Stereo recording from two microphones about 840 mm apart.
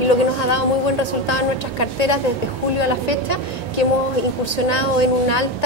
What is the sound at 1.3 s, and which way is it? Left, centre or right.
A woman's voice, left.